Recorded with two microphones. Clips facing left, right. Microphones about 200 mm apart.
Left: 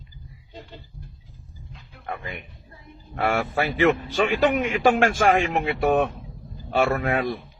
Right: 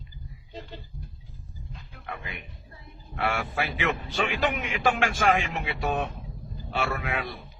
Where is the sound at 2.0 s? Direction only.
50° left (ahead or behind).